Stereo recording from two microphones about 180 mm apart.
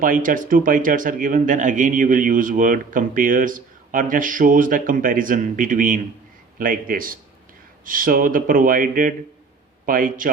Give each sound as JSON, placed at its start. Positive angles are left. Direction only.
{"t": 0.0, "sound": "speech", "side_deg": -50}